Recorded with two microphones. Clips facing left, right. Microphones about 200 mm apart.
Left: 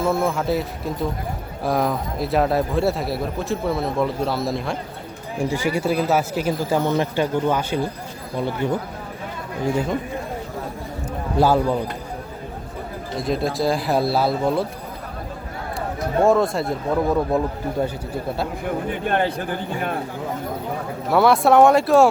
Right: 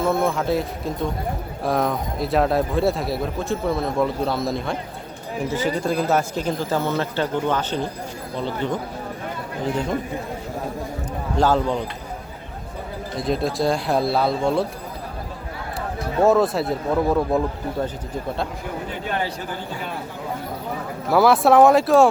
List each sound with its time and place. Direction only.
0.0 s speech: centre (ahead or behind)
5.5 s speech: 10° left (ahead or behind)
11.3 s speech: 10° left (ahead or behind)
13.1 s speech: centre (ahead or behind)
16.2 s speech: centre (ahead or behind)
18.9 s a man's voice: 55° left (ahead or behind)
21.1 s speech: centre (ahead or behind)